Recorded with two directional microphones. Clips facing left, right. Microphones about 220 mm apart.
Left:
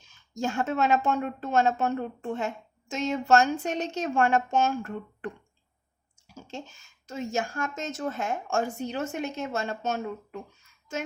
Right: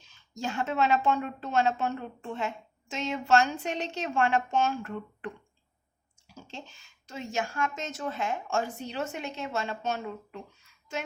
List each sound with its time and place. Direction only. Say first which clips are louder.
0.1 s a woman's voice: left 4 dB; 45° left (ahead or behind)
6.5 s a woman's voice: left 5 dB; 45° left (ahead or behind)